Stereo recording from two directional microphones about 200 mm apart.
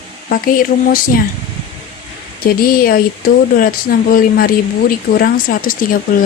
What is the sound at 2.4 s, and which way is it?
Speech, 45° left (ahead or behind).